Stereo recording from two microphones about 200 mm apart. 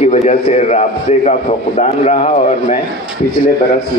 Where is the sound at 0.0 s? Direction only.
30° left (ahead or behind).